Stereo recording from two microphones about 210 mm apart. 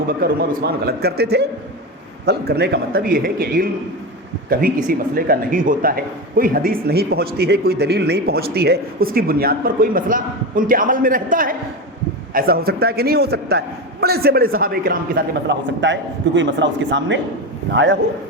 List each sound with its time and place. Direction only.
0.1 s speech: 45° right (ahead or behind)